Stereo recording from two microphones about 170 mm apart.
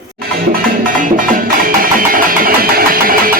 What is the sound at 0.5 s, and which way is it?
Music, 55° right (ahead or behind).